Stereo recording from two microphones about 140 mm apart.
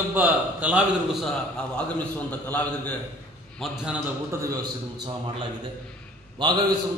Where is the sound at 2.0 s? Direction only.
10° left (ahead or behind).